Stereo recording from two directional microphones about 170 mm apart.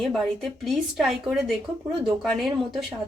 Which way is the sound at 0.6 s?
Centre (ahead or behind).